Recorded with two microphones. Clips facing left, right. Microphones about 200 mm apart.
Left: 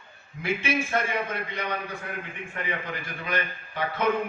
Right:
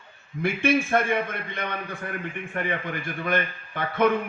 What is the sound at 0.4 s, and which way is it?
A man's voice, 55° right (ahead or behind).